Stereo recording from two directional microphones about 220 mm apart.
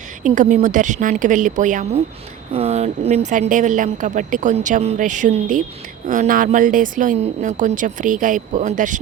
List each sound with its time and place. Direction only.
0.2 s a woman's voice: 35° right (ahead or behind)